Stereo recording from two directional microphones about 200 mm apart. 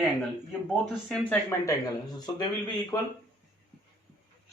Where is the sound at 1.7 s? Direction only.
20° left (ahead or behind).